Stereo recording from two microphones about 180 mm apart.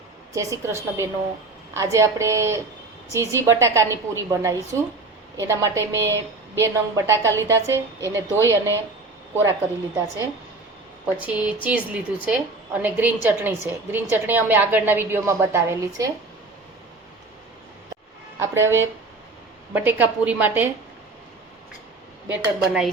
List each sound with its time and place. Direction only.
0.3 s a woman's voice: 15° right (ahead or behind)
11.0 s a woman's voice: 5° right (ahead or behind)
18.3 s a woman's voice: 15° right (ahead or behind)
22.3 s speech: 5° right (ahead or behind)